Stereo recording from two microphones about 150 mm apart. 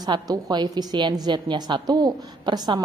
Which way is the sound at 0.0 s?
25° right (ahead or behind).